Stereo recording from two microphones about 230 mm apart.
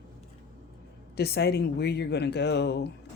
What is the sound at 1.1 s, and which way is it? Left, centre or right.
Speech, left.